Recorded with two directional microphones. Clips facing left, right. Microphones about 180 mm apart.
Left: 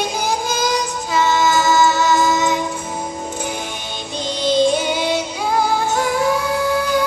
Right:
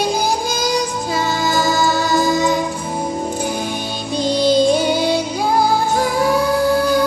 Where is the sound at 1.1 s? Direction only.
35° right (ahead or behind).